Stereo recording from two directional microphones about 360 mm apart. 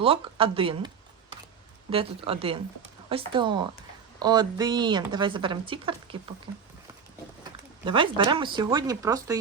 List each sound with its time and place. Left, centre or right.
0.0 s a woman's voice: centre
1.9 s a woman's voice: centre
7.9 s a woman's voice: centre